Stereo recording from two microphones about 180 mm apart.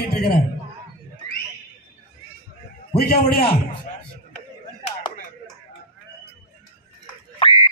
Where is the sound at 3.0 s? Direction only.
60° left (ahead or behind).